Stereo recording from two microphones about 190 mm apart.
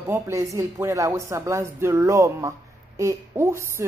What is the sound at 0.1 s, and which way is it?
Speech, 15° right (ahead or behind).